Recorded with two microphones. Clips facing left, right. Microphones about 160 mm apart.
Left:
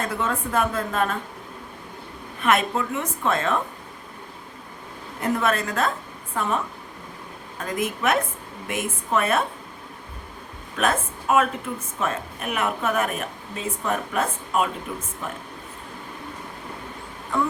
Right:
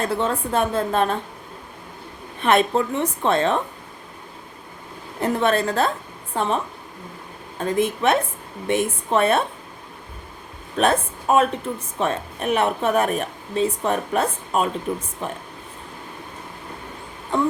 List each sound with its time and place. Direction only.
0.1 s a woman's voice: 30° right (ahead or behind)
2.4 s a woman's voice: 30° right (ahead or behind)
5.2 s a woman's voice: 30° right (ahead or behind)
7.6 s a woman's voice: 30° right (ahead or behind)
10.8 s a woman's voice: 30° right (ahead or behind)